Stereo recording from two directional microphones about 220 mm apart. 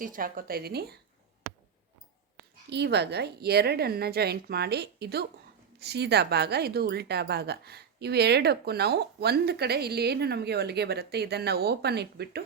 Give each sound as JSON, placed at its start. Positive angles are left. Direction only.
{"t": 0.0, "sound": "a woman's voice", "side_deg": -40}
{"t": 2.6, "sound": "a woman's voice", "side_deg": -50}